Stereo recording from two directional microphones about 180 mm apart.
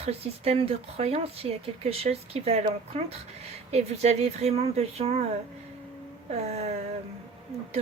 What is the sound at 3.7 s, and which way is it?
Speech, 35° right (ahead or behind).